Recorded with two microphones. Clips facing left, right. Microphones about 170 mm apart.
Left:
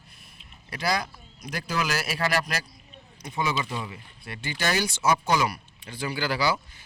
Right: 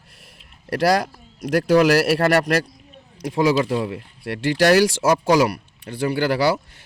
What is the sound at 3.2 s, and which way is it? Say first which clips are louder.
Speech: right 11 dB; 90° right.